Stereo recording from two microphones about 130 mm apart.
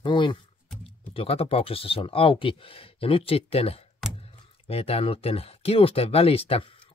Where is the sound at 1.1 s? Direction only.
45° left (ahead or behind).